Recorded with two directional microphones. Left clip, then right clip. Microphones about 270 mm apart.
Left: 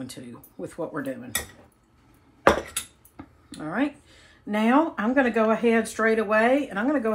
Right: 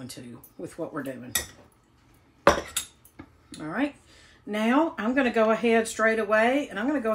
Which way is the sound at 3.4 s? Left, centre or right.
Centre.